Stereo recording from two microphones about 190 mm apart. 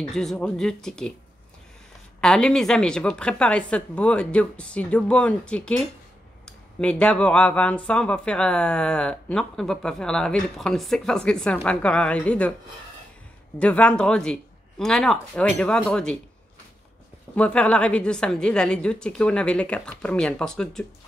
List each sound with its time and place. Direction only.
0.1 s speech: centre (ahead or behind)
2.1 s speech: 5° left (ahead or behind)
13.6 s speech: 5° left (ahead or behind)
17.4 s speech: 5° left (ahead or behind)